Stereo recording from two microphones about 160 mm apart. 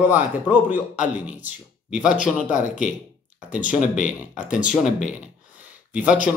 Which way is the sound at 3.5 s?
10° right (ahead or behind).